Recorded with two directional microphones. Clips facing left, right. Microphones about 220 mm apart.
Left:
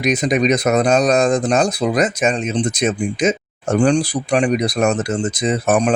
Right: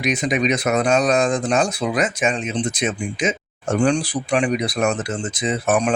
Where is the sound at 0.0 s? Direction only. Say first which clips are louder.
Left 4 dB; 40° left (ahead or behind).